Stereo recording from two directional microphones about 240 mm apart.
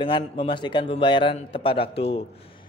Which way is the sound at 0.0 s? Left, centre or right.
Left.